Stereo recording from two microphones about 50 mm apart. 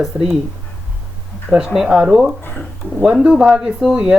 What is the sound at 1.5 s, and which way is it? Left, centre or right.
Speech, centre.